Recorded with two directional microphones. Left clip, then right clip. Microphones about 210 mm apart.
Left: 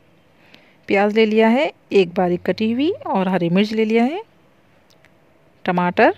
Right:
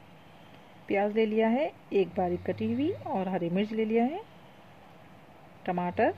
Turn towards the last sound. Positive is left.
turn(degrees=60)  # may be behind; listen again after turning